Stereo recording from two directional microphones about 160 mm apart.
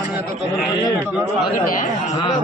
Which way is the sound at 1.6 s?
60° left (ahead or behind).